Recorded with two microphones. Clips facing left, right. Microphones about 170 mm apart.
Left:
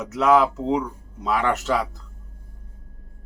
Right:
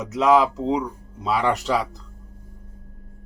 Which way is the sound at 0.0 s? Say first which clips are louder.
Right 1 dB; 20° right (ahead or behind).